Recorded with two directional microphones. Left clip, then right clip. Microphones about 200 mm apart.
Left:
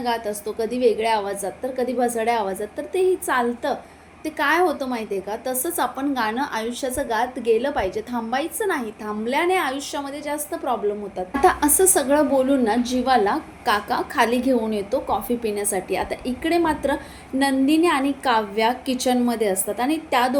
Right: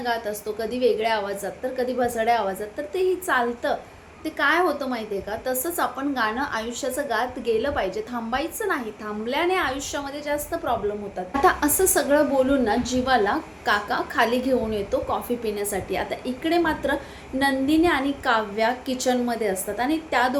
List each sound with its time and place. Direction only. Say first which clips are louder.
0.0 s a woman's voice: left 2 dB; 15° left (ahead or behind)